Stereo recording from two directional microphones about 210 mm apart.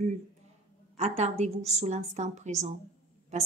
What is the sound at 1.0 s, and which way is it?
A woman's voice, 30° right (ahead or behind).